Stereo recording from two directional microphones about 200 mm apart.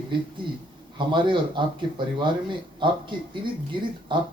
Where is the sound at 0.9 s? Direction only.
25° right (ahead or behind).